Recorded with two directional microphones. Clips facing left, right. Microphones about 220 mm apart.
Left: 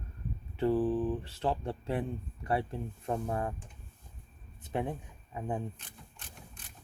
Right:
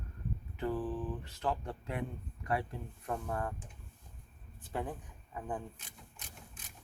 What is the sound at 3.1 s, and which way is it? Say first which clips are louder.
Speech: left 4 dB; 25° left (ahead or behind).